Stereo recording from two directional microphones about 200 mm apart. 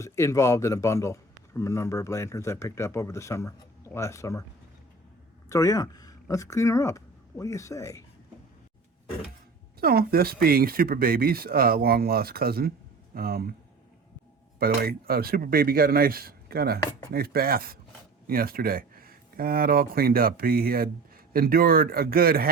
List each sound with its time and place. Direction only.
0.0 s a man's voice: 15° left (ahead or behind)
5.5 s speech: 15° left (ahead or behind)
9.8 s speech: 50° right (ahead or behind)
14.6 s speech: 50° right (ahead or behind)